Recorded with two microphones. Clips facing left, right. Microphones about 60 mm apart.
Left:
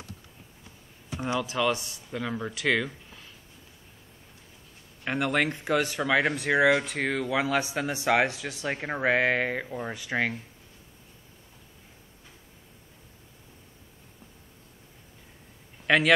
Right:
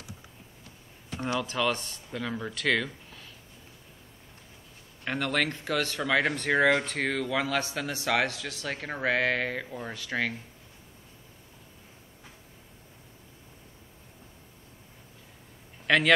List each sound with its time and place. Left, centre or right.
1.4 s speech: centre
5.0 s speech: centre
15.9 s speech: centre